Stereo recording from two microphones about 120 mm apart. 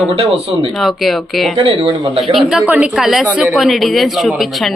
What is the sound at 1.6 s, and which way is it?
Speech, 50° right (ahead or behind).